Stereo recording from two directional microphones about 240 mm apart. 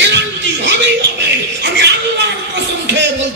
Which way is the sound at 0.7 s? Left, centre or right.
Right.